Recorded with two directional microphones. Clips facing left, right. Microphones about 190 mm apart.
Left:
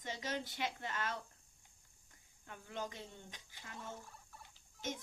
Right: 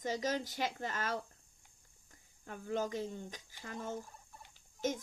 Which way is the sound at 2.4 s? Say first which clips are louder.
Right 8 dB; 45° right (ahead or behind).